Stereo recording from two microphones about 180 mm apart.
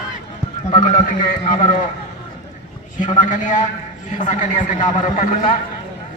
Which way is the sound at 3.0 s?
45° left (ahead or behind).